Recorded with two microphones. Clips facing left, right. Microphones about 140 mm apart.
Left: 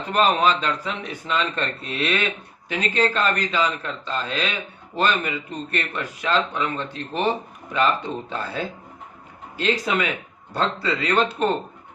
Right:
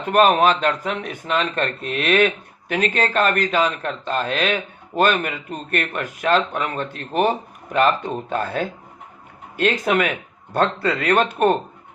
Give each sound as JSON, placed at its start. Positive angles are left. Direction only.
{"t": 0.1, "sound": "speech", "side_deg": -50}